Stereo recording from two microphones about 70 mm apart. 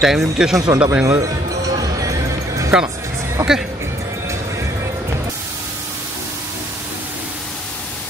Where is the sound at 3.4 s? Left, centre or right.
Right.